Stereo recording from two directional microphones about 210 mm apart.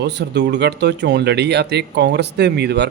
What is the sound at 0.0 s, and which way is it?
A man's voice, 55° right (ahead or behind).